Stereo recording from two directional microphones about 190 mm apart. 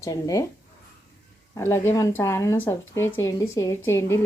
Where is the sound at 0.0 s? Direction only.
15° left (ahead or behind).